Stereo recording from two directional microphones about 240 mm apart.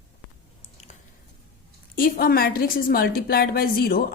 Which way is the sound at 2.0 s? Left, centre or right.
Left.